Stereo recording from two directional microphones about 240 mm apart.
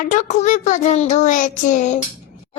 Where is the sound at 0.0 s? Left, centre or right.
Left.